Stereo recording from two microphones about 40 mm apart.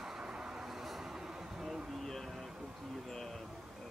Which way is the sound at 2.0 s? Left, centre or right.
Centre.